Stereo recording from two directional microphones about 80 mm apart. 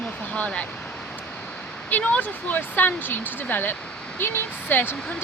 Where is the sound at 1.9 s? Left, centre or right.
Centre.